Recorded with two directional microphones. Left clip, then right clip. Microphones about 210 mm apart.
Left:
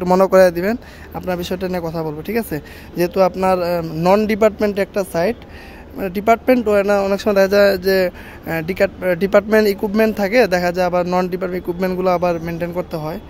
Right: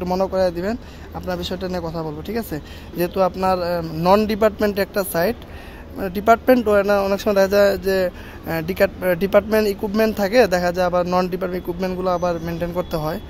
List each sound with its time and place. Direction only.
0.0 s speech: 40° left (ahead or behind); by 11.6 s 15° left (ahead or behind)
11.8 s speech: 25° left (ahead or behind)
12.4 s speech: 15° left (ahead or behind)